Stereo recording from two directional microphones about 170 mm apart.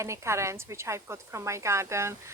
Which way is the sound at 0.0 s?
15° right (ahead or behind).